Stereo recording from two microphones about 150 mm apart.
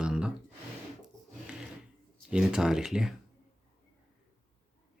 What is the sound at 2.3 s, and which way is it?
Speech, 5° right (ahead or behind).